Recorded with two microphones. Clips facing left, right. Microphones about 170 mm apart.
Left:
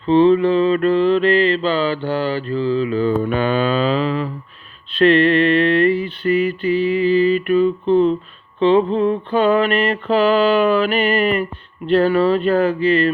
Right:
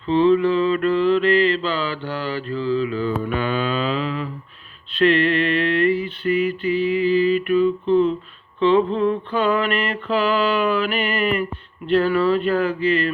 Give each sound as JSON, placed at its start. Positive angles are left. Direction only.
{"t": 0.1, "sound": "mantra", "side_deg": 25}